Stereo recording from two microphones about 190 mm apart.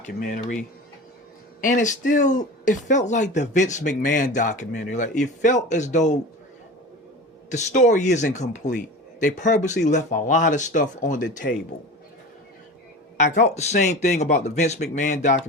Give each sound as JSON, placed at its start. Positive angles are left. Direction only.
{"t": 0.2, "sound": "speech", "side_deg": 45}
{"t": 1.6, "sound": "speech", "side_deg": 40}
{"t": 7.5, "sound": "speech", "side_deg": 40}
{"t": 13.1, "sound": "speech", "side_deg": 40}